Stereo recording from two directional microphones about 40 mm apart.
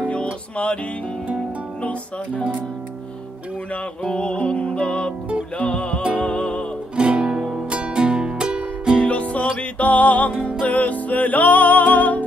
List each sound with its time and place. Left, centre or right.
0.1 s music: left
1.8 s speech: left
4.0 s music: left
7.0 s music: right
9.0 s music: left